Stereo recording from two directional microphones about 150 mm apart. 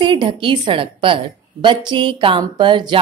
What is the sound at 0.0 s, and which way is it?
Speech, 30° right (ahead or behind).